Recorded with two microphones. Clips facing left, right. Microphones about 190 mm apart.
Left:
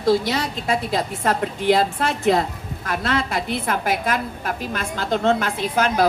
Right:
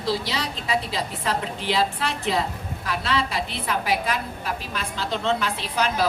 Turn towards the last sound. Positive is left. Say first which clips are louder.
# left 5 dB
turn(degrees=50)  # may be behind; listen again after turning